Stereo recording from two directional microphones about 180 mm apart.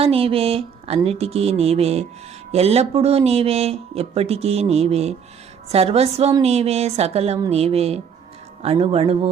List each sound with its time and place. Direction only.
0.0 s speech: 30° right (ahead or behind)